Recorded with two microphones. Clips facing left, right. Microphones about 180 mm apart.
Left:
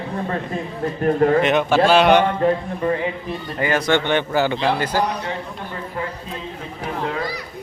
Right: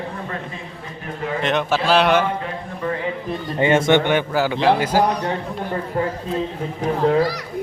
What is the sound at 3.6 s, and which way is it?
Speech, 25° right (ahead or behind).